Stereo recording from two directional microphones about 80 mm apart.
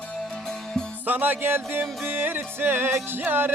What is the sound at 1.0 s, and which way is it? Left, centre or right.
Music, right.